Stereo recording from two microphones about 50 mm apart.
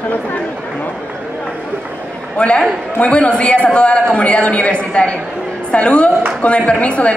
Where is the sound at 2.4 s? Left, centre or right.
Left.